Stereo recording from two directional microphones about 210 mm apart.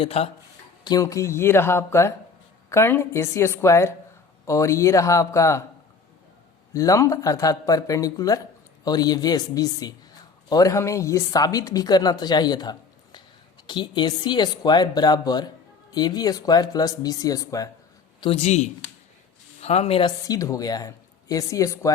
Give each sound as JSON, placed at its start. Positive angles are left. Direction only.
{"t": 0.0, "sound": "speech", "side_deg": 30}
{"t": 0.9, "sound": "speech", "side_deg": 15}
{"t": 6.7, "sound": "speech", "side_deg": 15}
{"t": 18.2, "sound": "a man's voice", "side_deg": 30}